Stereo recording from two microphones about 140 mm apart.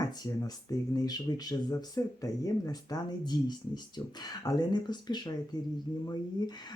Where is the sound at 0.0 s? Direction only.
25° left (ahead or behind).